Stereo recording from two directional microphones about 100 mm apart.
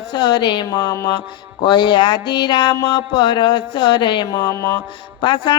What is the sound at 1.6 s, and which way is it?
Speech, 50° left (ahead or behind).